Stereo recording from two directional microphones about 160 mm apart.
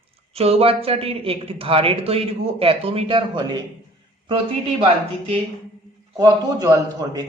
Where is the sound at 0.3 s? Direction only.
40° right (ahead or behind).